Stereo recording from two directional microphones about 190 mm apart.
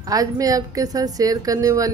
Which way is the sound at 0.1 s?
20° right (ahead or behind).